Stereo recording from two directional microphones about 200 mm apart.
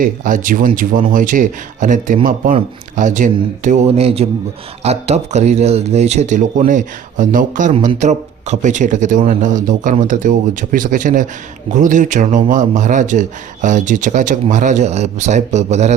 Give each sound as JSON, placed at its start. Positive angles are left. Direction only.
{"t": 0.0, "sound": "a man's voice", "side_deg": -40}